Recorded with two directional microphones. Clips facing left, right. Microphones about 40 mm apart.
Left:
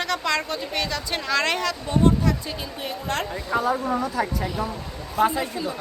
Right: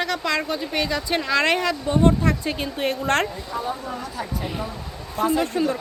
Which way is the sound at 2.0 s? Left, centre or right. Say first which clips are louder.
Right 1 dB; right.